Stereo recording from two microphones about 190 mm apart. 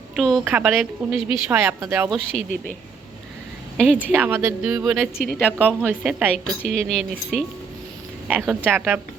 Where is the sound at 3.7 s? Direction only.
5° right (ahead or behind).